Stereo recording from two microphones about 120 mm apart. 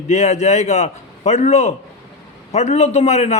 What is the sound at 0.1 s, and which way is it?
A man's voice, 70° left (ahead or behind).